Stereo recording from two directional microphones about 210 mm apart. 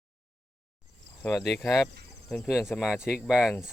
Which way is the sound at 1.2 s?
Centre (ahead or behind).